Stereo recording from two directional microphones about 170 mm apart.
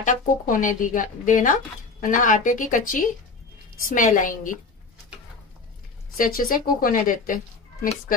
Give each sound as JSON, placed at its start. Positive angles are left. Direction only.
{"t": 0.0, "sound": "speech", "side_deg": 50}
{"t": 6.1, "sound": "speech", "side_deg": 55}